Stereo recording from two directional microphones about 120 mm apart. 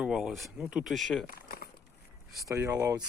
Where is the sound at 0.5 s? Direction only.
10° right (ahead or behind).